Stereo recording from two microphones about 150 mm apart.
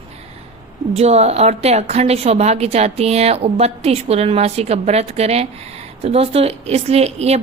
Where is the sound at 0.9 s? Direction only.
45° right (ahead or behind).